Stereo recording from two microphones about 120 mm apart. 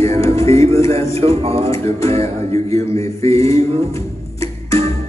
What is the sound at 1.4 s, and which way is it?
Speech, 55° right (ahead or behind).